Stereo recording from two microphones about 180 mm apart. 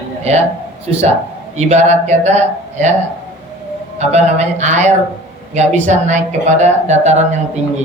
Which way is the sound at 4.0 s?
35° right (ahead or behind).